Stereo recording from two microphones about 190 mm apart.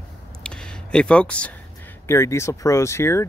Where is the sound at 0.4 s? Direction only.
5° left (ahead or behind).